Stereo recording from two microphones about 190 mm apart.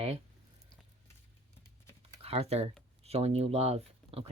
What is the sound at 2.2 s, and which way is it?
Speech, 30° right (ahead or behind).